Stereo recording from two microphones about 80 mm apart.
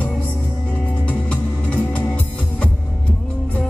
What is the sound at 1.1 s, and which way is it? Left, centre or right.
Music, centre.